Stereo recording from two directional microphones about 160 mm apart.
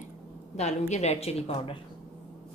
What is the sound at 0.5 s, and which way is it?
A woman's voice, 45° left (ahead or behind).